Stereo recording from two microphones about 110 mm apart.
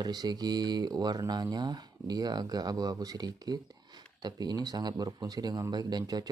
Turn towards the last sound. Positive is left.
turn(degrees=-35)  # may be behind; listen again after turning